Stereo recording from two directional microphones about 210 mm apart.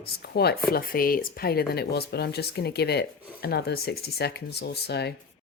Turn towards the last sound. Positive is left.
turn(degrees=50)  # may be behind; listen again after turning